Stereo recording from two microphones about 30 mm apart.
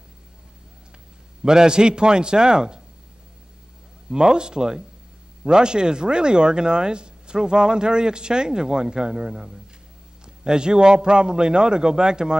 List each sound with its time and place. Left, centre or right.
1.4 s speech: right
4.1 s speech: right